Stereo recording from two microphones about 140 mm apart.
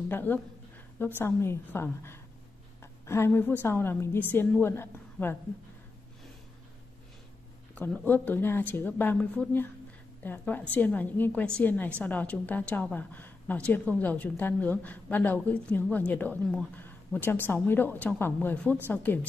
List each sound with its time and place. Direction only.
0.1 s a woman's voice: 15° left (ahead or behind)
7.7 s a woman's voice: 10° left (ahead or behind)